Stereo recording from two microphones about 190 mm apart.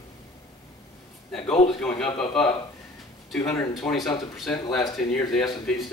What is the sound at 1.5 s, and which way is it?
Speech, 5° left (ahead or behind).